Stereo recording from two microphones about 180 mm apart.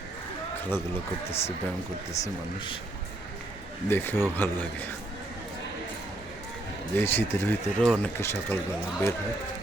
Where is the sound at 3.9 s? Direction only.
10° left (ahead or behind).